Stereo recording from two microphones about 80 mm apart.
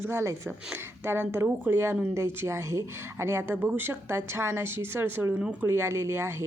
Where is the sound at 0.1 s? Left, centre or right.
Right.